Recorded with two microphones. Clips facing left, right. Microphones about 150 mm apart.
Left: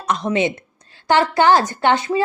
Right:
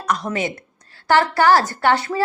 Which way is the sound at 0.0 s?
25° left (ahead or behind).